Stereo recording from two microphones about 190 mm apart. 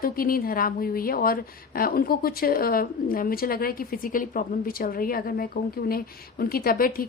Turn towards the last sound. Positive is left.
turn(degrees=50)  # may be behind; listen again after turning